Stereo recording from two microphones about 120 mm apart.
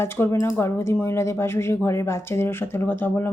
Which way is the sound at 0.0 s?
25° left (ahead or behind).